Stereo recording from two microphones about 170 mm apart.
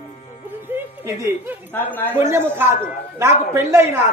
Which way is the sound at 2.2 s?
15° right (ahead or behind).